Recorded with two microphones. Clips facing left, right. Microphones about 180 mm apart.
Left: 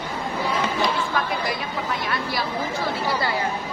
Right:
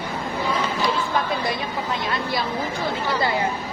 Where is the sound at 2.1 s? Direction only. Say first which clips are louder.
Right 2 dB; 25° right (ahead or behind).